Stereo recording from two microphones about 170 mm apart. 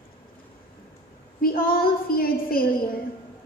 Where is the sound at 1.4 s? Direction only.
60° left (ahead or behind).